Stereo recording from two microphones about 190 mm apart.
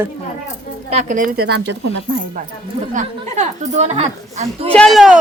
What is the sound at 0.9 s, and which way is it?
Speech, 40° right (ahead or behind).